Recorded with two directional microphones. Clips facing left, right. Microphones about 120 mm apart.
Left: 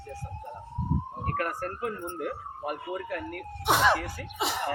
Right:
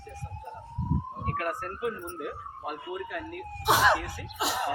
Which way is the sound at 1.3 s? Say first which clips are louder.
Left 2 dB; 40° left (ahead or behind).